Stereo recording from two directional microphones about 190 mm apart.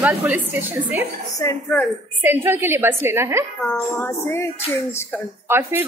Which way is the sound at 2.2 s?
10° right (ahead or behind).